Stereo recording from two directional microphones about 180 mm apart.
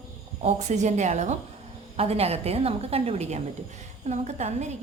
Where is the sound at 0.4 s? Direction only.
40° right (ahead or behind).